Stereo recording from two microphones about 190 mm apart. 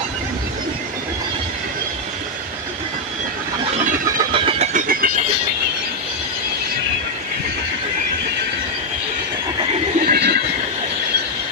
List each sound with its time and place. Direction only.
4.3 s vehicle: 30° right (ahead or behind)
4.7 s vehicle: 50° right (ahead or behind)
10.0 s neigh: 55° right (ahead or behind)